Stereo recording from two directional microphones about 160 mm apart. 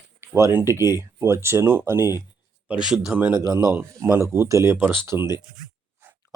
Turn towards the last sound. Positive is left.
turn(degrees=-15)  # may be behind; listen again after turning